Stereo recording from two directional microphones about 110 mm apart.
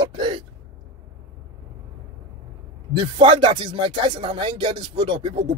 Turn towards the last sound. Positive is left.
turn(degrees=-50)  # may be behind; listen again after turning